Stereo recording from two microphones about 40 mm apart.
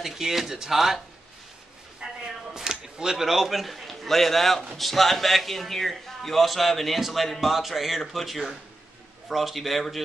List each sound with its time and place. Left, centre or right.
0.0 s speech: centre
2.0 s a sound: centre
2.5 s a man's voice: centre